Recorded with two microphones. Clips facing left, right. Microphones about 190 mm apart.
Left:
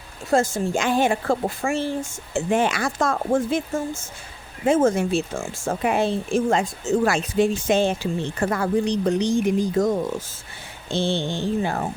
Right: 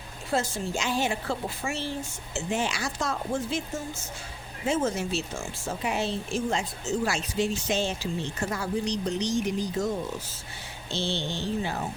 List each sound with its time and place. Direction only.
0.3 s speech: 45° left (ahead or behind)